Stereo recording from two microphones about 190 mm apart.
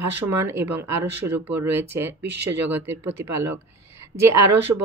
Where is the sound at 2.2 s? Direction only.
65° right (ahead or behind).